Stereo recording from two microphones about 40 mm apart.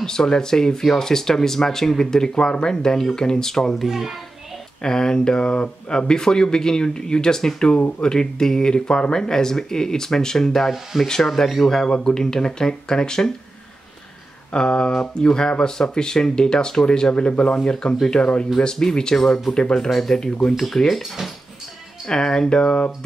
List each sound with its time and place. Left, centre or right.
0.0 s speech: centre
3.8 s a child's voice: centre
4.8 s speech: centre
10.7 s speech: centre
11.1 s speech: centre
14.5 s speech: left
22.0 s speech: centre